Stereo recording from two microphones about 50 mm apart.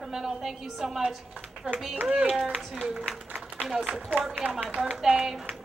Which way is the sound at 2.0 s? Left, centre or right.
Centre.